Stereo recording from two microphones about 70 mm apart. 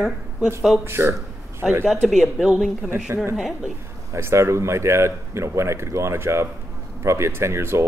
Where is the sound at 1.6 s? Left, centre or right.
Right.